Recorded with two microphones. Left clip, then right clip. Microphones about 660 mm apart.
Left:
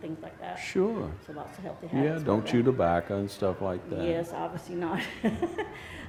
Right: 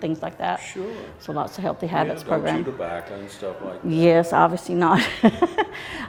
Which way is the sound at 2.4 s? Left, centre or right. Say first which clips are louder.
Even; left.